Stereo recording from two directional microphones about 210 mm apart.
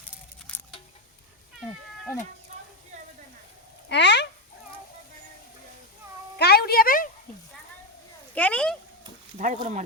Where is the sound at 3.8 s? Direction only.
55° left (ahead or behind).